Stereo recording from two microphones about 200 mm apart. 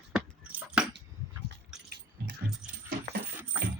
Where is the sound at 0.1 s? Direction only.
5° right (ahead or behind).